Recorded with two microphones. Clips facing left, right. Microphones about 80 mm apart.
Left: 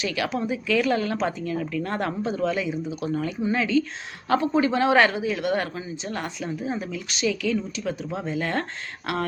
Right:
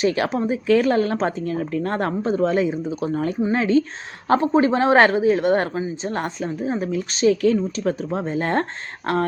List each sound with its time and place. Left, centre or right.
0.0 s speech: right